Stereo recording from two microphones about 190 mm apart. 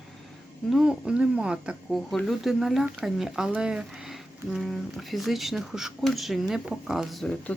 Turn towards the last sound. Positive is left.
turn(degrees=5)  # may be behind; listen again after turning